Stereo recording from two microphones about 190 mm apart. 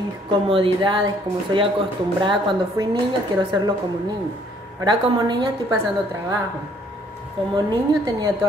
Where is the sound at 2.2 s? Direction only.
25° right (ahead or behind).